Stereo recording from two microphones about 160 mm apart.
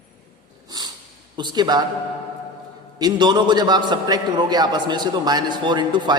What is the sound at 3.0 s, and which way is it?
A man's voice, 25° right (ahead or behind).